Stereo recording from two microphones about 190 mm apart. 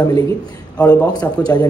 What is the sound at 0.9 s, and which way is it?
Speech, 20° left (ahead or behind).